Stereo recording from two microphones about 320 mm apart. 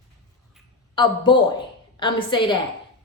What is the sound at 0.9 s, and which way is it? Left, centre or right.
A woman's voice, centre.